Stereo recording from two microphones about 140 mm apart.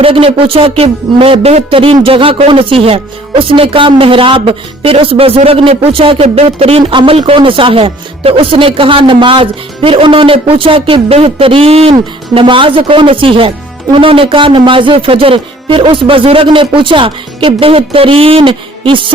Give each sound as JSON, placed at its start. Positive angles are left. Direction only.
{"t": 0.0, "sound": "speech", "side_deg": -40}